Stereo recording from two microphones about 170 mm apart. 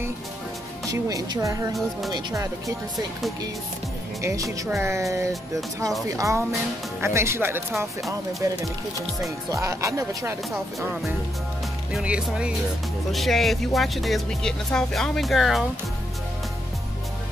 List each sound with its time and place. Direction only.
0.8 s speech: 20° right (ahead or behind)
4.2 s speech: 15° right (ahead or behind)
9.5 s speech: 20° right (ahead or behind)
11.9 s speech: 5° right (ahead or behind)